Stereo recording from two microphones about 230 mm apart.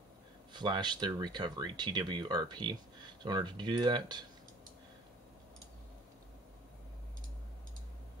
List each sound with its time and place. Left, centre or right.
0.5 s speech: centre